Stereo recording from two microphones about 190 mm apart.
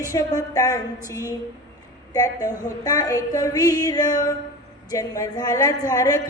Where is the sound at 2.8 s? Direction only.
20° left (ahead or behind).